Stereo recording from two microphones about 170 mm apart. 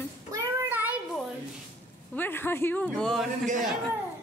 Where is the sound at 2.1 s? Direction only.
10° left (ahead or behind).